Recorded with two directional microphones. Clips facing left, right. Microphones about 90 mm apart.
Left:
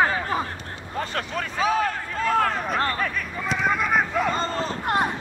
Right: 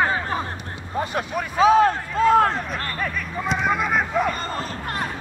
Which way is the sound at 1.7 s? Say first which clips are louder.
Right 9 dB; 25° right (ahead or behind).